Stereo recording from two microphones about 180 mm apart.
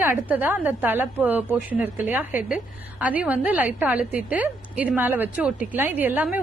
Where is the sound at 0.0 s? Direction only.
10° right (ahead or behind).